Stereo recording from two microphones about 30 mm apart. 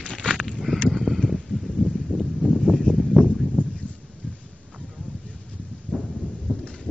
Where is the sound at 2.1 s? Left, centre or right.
Right.